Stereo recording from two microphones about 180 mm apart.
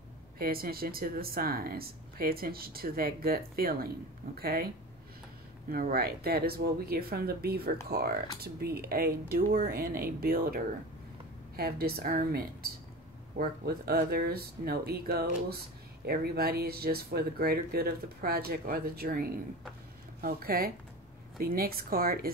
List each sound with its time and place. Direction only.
0.4 s speech: 55° right (ahead or behind)
5.7 s speech: 55° right (ahead or behind)